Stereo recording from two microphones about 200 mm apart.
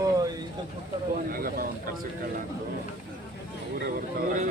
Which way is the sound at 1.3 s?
45° right (ahead or behind).